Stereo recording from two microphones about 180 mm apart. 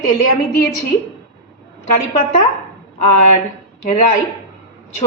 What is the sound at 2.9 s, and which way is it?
A woman's voice, 40° left (ahead or behind).